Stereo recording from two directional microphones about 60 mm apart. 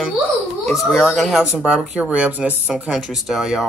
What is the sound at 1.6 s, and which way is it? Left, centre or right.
Speech, centre.